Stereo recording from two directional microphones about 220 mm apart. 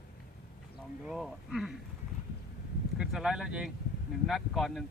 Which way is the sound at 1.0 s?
Centre (ahead or behind).